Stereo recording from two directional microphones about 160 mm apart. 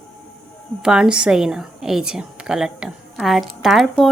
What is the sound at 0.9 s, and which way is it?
A woman's voice, 5° right (ahead or behind).